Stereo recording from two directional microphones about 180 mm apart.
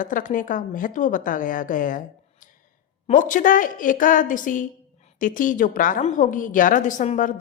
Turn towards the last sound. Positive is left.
turn(degrees=45)  # may be behind; listen again after turning